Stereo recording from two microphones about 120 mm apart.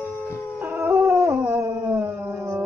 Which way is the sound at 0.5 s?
15° right (ahead or behind).